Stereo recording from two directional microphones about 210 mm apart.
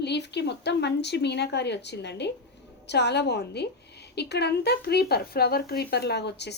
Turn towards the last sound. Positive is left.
turn(degrees=55)  # may be behind; listen again after turning